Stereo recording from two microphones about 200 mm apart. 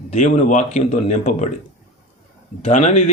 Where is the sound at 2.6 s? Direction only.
35° left (ahead or behind).